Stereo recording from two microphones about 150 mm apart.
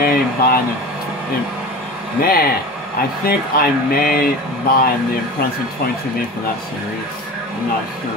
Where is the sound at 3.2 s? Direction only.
80° left.